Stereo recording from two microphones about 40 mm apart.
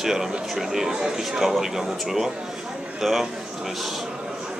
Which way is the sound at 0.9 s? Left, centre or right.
Centre.